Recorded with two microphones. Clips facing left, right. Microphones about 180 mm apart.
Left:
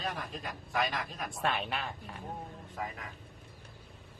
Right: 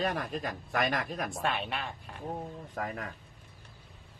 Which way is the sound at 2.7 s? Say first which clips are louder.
Right 4 dB; 60° right (ahead or behind).